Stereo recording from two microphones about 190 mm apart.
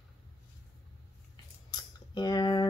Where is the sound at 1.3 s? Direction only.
20° left (ahead or behind).